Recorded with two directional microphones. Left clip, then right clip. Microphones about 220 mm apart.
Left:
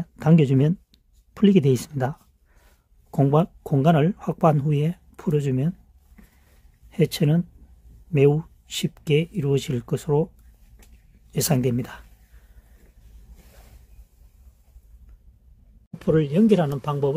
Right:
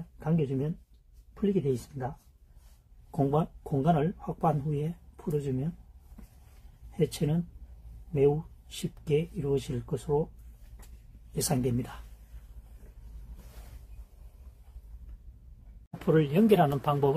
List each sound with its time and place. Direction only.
0.2 s speech: 55° left (ahead or behind)
7.0 s speech: 45° left (ahead or behind)
11.3 s speech: 45° left (ahead or behind)
16.0 s speech: 30° left (ahead or behind)